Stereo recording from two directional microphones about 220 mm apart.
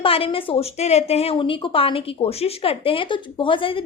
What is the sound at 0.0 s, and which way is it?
A woman's voice, 25° left (ahead or behind).